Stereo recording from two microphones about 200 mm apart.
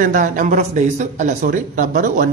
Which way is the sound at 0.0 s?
40° right (ahead or behind).